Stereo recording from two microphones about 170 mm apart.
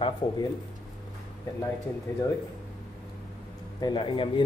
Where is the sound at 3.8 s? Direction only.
25° left (ahead or behind).